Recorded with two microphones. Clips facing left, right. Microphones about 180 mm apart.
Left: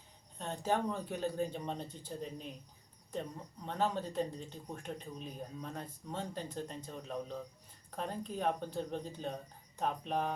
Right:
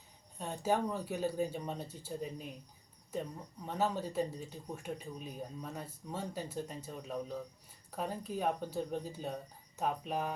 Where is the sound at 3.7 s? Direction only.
5° right (ahead or behind).